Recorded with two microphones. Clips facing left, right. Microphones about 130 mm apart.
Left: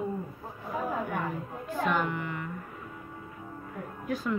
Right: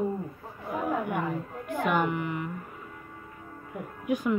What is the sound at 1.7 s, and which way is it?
Speech, 15° right (ahead or behind).